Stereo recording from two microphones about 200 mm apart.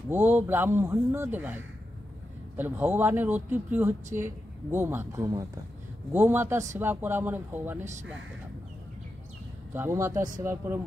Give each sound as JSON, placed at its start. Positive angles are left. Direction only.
{"t": 0.1, "sound": "a man's voice", "side_deg": -10}
{"t": 9.8, "sound": "a man's voice", "side_deg": -15}
{"t": 10.1, "sound": "speech", "side_deg": -40}
{"t": 10.4, "sound": "a man's voice", "side_deg": -10}